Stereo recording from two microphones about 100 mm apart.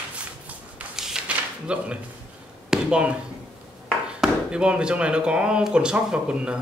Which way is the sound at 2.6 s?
10° right (ahead or behind).